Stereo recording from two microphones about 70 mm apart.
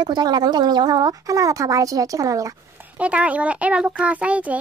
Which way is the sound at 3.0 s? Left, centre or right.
Centre.